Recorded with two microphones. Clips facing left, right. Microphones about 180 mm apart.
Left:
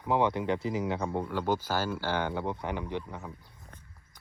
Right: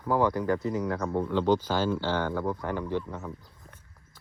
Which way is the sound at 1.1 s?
10° left (ahead or behind).